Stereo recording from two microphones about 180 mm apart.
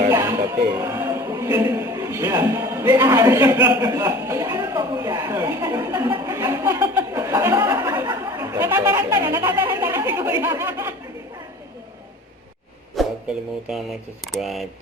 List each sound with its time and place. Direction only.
0.1 s speech: 20° right (ahead or behind)
13.0 s speech: centre (ahead or behind)